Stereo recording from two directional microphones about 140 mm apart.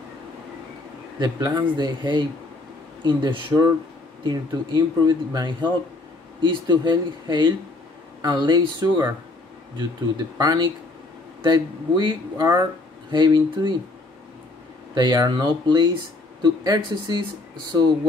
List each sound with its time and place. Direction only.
1.2 s speech: 30° right (ahead or behind)
15.0 s speech: 30° right (ahead or behind)